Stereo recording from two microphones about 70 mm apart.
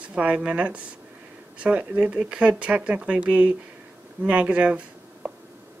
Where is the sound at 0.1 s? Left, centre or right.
Centre.